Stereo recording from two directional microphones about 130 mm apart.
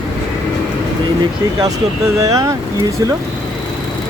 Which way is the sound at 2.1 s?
25° right (ahead or behind).